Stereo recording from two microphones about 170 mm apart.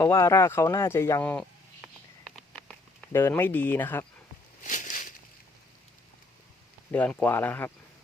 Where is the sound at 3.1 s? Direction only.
15° left (ahead or behind).